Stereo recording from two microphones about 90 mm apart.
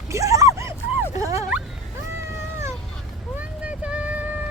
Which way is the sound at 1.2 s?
35° right (ahead or behind).